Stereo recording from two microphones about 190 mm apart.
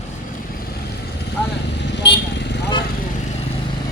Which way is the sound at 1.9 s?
65° left (ahead or behind).